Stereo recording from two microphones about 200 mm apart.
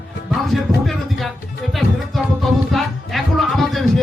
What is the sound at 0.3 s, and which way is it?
Music, centre (ahead or behind).